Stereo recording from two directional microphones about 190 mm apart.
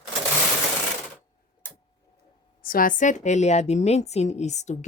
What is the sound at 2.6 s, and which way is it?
A woman's voice, 50° left (ahead or behind).